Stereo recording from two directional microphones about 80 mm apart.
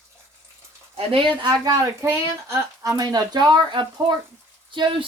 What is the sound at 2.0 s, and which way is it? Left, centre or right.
Speech, right.